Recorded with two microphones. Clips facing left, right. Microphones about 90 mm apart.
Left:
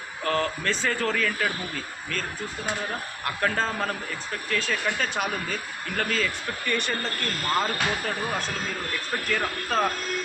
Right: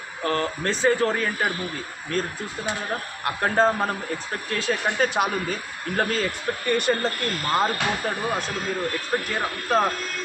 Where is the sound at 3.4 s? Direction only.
35° right (ahead or behind).